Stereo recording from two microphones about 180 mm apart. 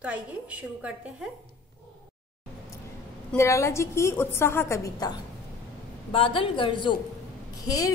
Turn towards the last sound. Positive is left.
turn(degrees=20)  # may be behind; listen again after turning